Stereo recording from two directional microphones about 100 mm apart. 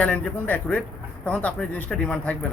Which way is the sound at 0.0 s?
15° left (ahead or behind).